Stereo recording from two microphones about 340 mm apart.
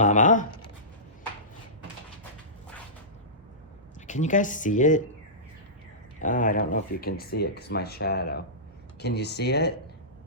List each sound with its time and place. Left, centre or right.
0.0 s a sound: left
4.0 s speech: left
6.1 s speech: left